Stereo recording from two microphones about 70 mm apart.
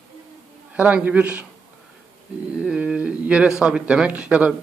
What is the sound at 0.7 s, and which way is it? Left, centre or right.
Speech, right.